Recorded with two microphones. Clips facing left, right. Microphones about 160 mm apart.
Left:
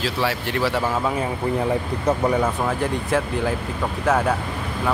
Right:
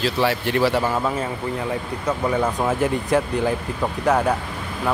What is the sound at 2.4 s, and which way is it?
Speech, 15° right (ahead or behind).